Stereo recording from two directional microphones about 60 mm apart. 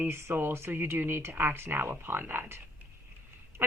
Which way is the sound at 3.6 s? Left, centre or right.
Right.